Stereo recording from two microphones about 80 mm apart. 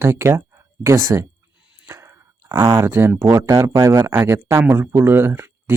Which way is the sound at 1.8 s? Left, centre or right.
Right.